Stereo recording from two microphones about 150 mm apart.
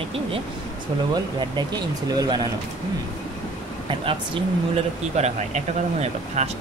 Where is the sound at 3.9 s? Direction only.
35° right (ahead or behind).